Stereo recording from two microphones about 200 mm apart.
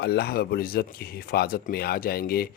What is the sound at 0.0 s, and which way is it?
Speech, 55° left (ahead or behind).